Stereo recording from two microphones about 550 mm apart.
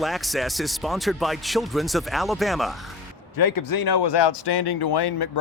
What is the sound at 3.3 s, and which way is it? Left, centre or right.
Speech, left.